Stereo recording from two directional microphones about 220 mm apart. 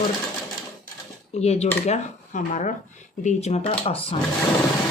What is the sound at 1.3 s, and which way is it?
Speech, 30° left (ahead or behind).